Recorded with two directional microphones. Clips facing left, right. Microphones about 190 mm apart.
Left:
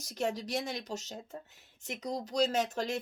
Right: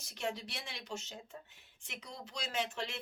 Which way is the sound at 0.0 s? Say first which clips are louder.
Left 6 dB; 40° left (ahead or behind).